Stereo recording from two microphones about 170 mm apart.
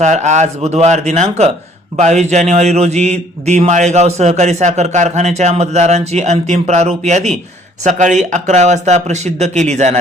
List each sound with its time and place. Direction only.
0.0 s a man's voice: 45° right (ahead or behind)